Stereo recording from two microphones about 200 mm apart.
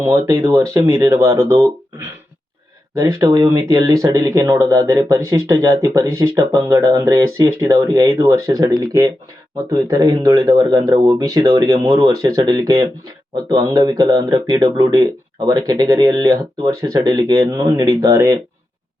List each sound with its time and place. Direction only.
0.0 s speech: 10° right (ahead or behind)
2.9 s speech: 15° right (ahead or behind)